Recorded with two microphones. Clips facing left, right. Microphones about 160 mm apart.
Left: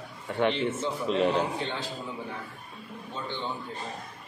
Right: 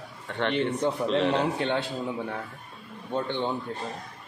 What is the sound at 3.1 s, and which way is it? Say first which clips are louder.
Speech: right 8 dB; 60° right (ahead or behind).